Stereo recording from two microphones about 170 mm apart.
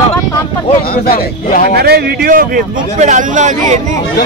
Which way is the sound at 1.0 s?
60° left (ahead or behind).